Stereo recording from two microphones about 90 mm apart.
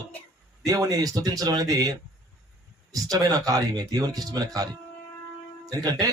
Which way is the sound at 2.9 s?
40° right (ahead or behind).